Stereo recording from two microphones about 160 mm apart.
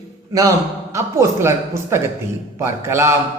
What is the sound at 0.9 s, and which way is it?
Speech, 20° right (ahead or behind).